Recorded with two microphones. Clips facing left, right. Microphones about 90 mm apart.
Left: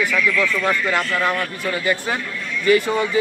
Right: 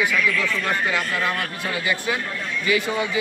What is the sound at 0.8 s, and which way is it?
Speech, 50° left (ahead or behind).